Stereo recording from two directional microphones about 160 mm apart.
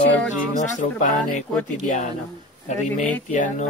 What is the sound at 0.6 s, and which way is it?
Speech, 50° left (ahead or behind).